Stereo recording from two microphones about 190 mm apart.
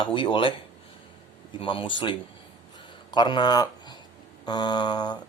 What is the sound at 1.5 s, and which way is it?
Speech, 30° left (ahead or behind).